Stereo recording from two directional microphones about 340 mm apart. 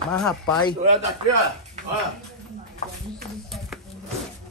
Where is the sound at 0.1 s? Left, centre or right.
Centre.